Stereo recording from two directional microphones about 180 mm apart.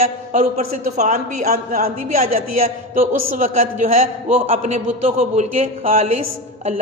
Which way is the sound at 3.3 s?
45° right (ahead or behind).